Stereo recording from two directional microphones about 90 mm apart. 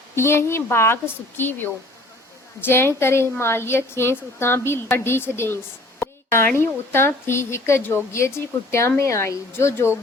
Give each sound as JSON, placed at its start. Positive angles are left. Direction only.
{"t": 0.2, "sound": "a woman's voice", "side_deg": 30}